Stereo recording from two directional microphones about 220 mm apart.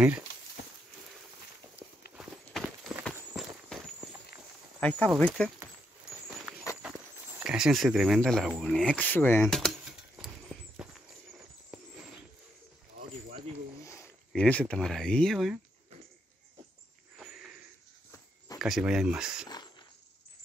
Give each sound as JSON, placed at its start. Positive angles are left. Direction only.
{"t": 1.8, "sound": "clip-clop", "side_deg": 50}
{"t": 2.1, "sound": "walk", "side_deg": 0}
{"t": 4.7, "sound": "speech", "side_deg": 5}
{"t": 6.8, "sound": "a sound", "side_deg": -5}
{"t": 13.8, "sound": "speech", "side_deg": 10}
{"t": 18.6, "sound": "speech", "side_deg": 0}